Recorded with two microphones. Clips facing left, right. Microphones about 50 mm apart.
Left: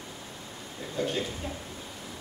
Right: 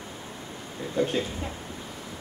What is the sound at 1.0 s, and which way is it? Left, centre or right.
Speech, right.